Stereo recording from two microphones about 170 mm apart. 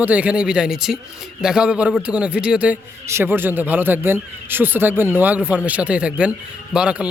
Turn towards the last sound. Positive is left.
turn(degrees=-5)  # may be behind; listen again after turning